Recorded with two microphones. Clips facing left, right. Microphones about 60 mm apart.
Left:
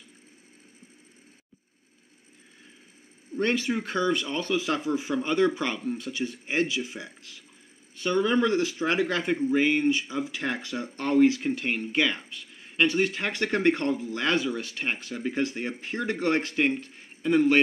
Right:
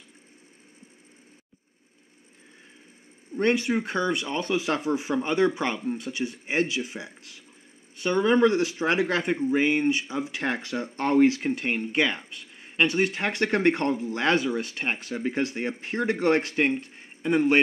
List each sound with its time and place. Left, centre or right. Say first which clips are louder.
3.3 s speech: right 3 dB; right
6.5 s speech: right 1 dB; right
9.2 s speech: even; centre